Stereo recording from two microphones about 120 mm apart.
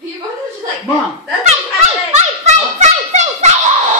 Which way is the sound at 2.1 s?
75° right (ahead or behind).